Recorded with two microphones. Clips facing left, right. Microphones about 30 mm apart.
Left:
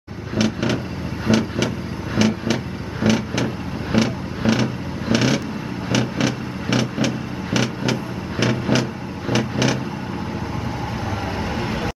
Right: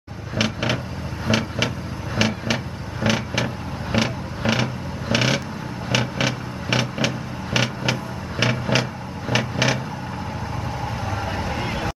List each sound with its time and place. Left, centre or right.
0.4 s vehicle: centre
1.3 s vehicle: centre
2.1 s vehicle: centre
3.0 s vehicle: centre
3.4 s vehicle: centre
4.4 s creak: centre
5.1 s a sound: centre
7.5 s vehicle: centre
8.7 s vehicle: centre
9.3 s vehicle: centre
11.3 s vehicle: centre